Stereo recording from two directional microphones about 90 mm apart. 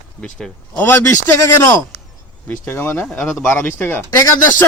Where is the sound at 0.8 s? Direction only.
25° left (ahead or behind).